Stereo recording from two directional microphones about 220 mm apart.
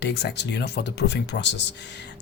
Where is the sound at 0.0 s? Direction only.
50° left (ahead or behind).